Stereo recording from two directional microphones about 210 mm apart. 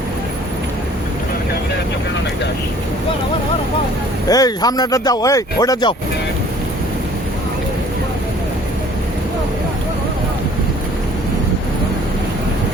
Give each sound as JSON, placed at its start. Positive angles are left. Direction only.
{"t": 4.3, "sound": "speech", "side_deg": 15}